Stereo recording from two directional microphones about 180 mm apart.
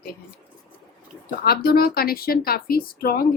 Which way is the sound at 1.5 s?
55° left (ahead or behind).